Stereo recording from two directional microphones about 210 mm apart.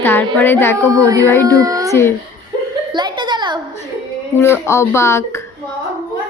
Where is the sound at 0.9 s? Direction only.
15° right (ahead or behind).